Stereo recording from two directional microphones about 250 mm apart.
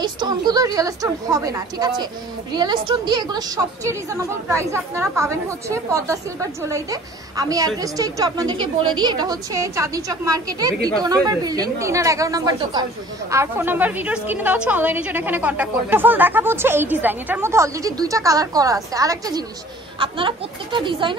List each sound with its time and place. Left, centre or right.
0.0 s a woman's voice: centre